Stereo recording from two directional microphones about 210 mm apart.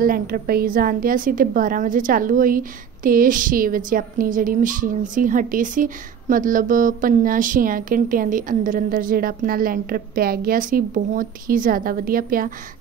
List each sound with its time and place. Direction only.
0.0 s a woman's voice: 45° right (ahead or behind)